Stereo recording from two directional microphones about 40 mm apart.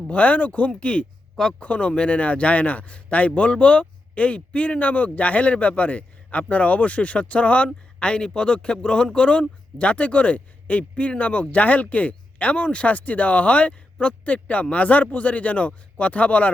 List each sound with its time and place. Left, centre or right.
0.1 s a man's voice: left